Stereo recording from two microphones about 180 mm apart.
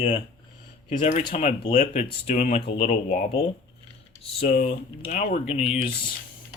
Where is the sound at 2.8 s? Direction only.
50° left (ahead or behind).